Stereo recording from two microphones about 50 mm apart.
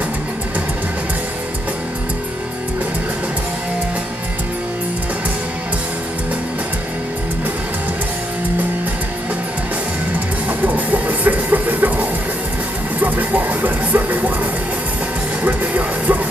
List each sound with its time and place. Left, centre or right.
10.1 s music: right
15.4 s music: right